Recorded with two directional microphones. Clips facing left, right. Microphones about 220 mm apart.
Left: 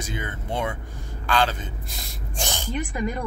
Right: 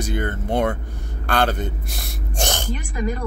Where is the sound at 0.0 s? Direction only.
60° right (ahead or behind).